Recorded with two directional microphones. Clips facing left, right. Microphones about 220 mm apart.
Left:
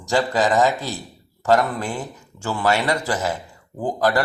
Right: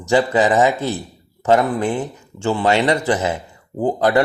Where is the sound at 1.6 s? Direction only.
15° right (ahead or behind).